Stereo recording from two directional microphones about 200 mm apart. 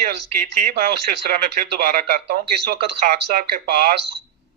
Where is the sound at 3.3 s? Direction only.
45° right (ahead or behind).